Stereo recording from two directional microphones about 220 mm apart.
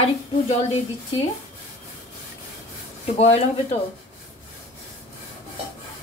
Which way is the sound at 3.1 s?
30° left (ahead or behind).